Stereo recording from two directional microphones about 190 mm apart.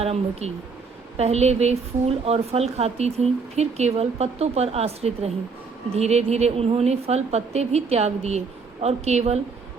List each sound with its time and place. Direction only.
0.0 s a woman's voice: 35° right (ahead or behind)